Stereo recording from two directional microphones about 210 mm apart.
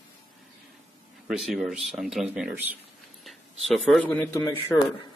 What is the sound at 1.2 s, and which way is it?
A man's voice, centre (ahead or behind).